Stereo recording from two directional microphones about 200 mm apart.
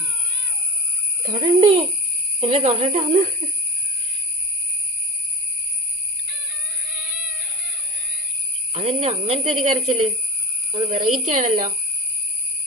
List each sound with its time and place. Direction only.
1.2 s a child's voice: 25° right (ahead or behind)
7.0 s cat: 10° right (ahead or behind)
8.7 s speech: 30° right (ahead or behind)